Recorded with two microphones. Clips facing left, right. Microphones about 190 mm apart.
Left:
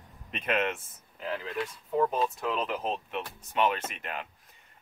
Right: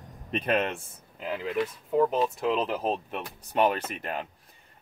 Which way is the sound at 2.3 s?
30° right (ahead or behind).